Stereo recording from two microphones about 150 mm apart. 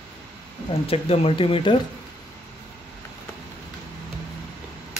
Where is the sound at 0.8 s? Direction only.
40° left (ahead or behind).